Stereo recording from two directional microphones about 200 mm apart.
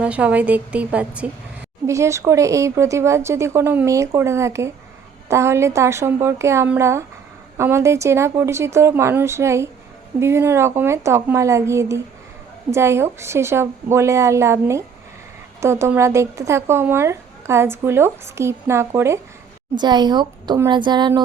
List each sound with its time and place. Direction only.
0.0 s a woman's voice: 5° right (ahead or behind); by 21.1 s 20° right (ahead or behind)